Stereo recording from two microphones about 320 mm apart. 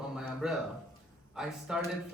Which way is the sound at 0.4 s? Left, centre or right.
Centre.